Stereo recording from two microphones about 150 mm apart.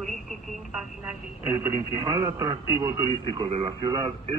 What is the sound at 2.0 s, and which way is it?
A man's voice, 25° right (ahead or behind).